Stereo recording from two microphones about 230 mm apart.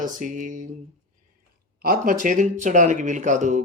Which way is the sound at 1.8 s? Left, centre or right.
Right.